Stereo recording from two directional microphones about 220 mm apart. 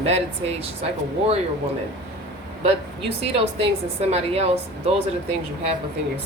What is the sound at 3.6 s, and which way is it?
Speech, 30° right (ahead or behind).